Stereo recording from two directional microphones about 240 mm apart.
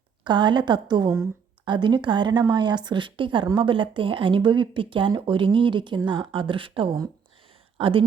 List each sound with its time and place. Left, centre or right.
0.3 s a woman's voice: centre